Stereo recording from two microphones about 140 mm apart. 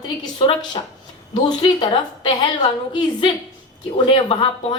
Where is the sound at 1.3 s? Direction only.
35° left (ahead or behind).